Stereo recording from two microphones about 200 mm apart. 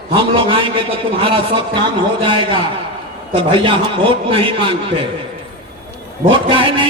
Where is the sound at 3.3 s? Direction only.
25° right (ahead or behind).